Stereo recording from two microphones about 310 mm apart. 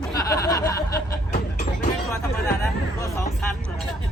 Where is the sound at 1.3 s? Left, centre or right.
Left.